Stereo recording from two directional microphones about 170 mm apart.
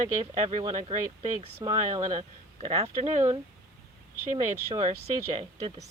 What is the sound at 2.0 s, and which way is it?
Speech, 50° right (ahead or behind).